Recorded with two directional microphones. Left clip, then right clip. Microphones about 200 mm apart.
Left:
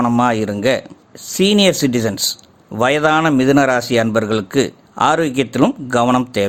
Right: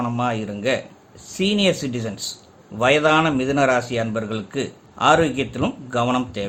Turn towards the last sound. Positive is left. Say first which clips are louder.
# left 7 dB
turn(degrees=45)  # may be behind; listen again after turning